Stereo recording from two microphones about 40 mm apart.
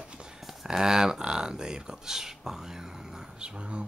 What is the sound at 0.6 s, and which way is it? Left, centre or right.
Speech, centre.